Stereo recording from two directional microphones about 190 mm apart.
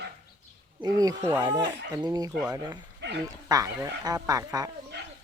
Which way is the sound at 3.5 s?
20° right (ahead or behind).